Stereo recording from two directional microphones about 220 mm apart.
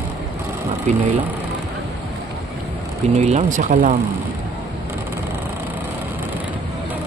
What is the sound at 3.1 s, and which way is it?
Speech, 30° right (ahead or behind).